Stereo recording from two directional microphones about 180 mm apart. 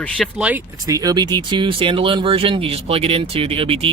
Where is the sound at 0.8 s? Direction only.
20° right (ahead or behind).